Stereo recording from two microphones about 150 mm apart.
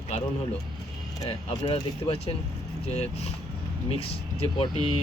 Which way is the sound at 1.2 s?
45° left (ahead or behind).